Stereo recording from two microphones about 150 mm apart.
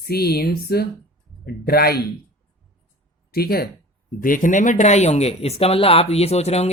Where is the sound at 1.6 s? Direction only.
90° left.